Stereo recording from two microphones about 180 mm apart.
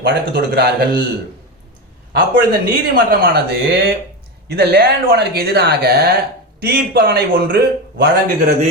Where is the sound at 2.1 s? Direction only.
60° right (ahead or behind).